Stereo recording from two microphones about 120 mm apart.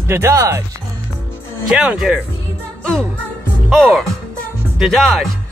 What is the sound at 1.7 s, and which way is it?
Speech, 5° right (ahead or behind).